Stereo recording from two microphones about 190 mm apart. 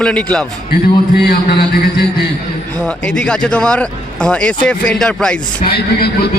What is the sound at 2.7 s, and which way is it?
Speech, 5° left (ahead or behind).